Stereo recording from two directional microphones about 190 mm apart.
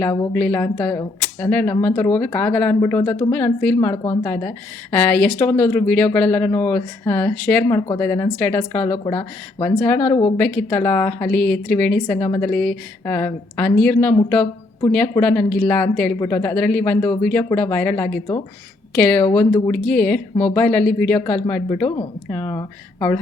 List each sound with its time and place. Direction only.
0.3 s speech: 10° left (ahead or behind)
4.0 s a woman's voice: 25° left (ahead or behind)